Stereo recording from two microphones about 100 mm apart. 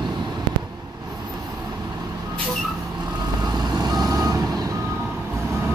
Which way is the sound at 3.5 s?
40° right (ahead or behind).